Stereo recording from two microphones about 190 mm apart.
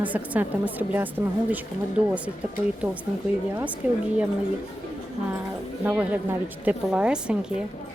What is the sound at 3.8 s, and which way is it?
Speech, 10° right (ahead or behind).